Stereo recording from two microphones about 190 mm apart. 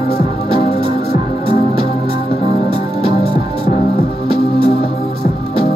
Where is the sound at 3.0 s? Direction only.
25° right (ahead or behind).